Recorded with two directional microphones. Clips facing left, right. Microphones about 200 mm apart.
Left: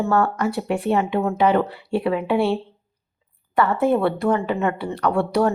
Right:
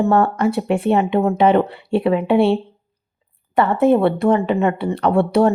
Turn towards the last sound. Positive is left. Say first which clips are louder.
# right 4 dB
turn(degrees=-25)  # may be behind; listen again after turning